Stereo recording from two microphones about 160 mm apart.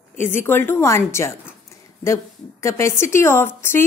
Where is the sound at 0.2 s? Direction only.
15° left (ahead or behind).